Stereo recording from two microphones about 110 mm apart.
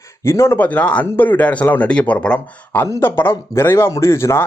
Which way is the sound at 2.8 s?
25° left (ahead or behind).